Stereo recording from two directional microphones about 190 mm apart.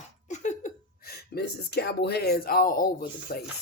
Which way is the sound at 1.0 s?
55° left (ahead or behind).